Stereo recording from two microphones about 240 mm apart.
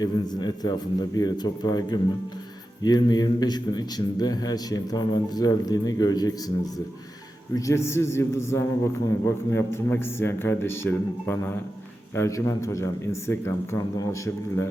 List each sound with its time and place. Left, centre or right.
0.0 s a man's voice: centre
7.5 s a man's voice: centre